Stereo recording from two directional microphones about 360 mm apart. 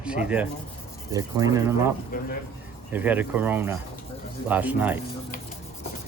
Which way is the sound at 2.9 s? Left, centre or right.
Centre.